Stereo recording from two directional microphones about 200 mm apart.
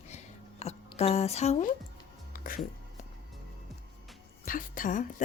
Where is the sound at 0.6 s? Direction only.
30° left (ahead or behind).